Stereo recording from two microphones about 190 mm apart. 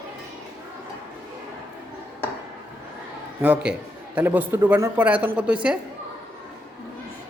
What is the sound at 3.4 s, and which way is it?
A woman's voice, 5° right (ahead or behind).